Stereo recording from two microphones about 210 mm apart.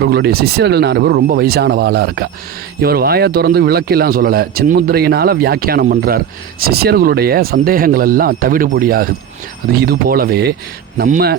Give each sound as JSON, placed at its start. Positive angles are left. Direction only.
{"t": 0.0, "sound": "speech", "side_deg": -50}